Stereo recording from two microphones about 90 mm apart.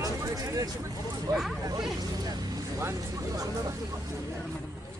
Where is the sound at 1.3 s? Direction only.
45° right (ahead or behind).